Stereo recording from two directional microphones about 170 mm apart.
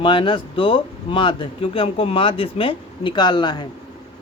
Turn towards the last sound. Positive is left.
turn(degrees=25)  # may be behind; listen again after turning